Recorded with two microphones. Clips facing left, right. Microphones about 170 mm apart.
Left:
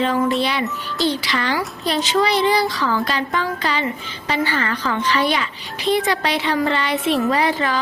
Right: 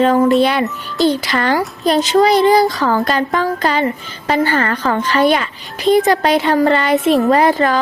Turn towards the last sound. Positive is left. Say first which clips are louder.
# right 7 dB
turn(degrees=-45)  # may be behind; listen again after turning